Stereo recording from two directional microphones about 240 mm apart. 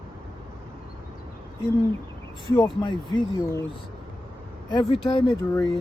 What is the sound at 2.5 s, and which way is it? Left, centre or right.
Speech, centre.